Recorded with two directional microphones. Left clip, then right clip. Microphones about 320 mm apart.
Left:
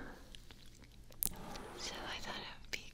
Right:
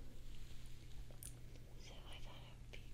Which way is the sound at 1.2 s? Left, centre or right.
Left.